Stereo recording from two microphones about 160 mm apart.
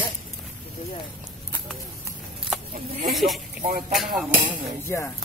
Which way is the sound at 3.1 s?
Centre (ahead or behind).